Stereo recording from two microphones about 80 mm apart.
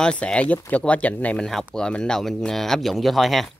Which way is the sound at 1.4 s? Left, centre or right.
Centre.